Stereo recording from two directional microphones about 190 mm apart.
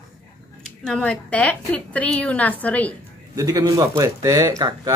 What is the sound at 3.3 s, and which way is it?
A man's voice, 20° right (ahead or behind).